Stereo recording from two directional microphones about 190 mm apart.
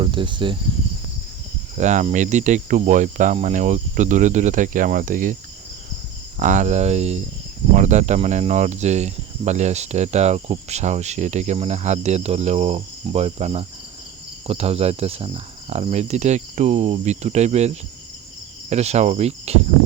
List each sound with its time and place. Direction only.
0.0 s speech: 25° right (ahead or behind)
1.7 s cricket: 40° right (ahead or behind)
6.4 s cricket: 40° right (ahead or behind)